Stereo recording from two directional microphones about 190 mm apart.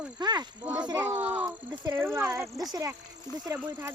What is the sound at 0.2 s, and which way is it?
Speech, 20° right (ahead or behind).